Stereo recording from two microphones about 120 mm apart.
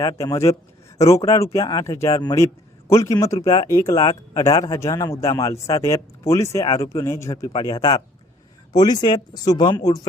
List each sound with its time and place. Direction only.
0.2 s a man's voice: 25° left (ahead or behind)